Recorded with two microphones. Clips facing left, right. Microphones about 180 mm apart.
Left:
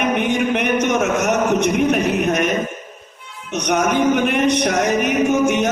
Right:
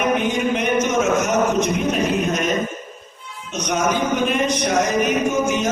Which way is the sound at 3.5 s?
65° left (ahead or behind).